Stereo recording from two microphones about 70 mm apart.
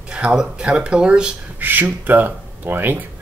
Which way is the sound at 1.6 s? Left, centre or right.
Right.